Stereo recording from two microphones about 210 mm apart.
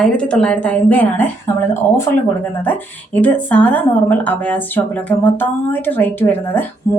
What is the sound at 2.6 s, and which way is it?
A woman's voice, 10° left (ahead or behind).